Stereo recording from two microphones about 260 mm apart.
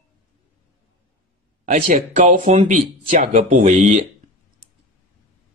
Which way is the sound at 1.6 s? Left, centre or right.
Right.